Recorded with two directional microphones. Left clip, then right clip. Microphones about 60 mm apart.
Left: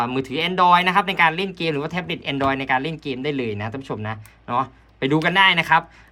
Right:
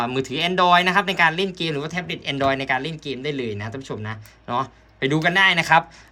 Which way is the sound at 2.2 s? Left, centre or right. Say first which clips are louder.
Even; centre.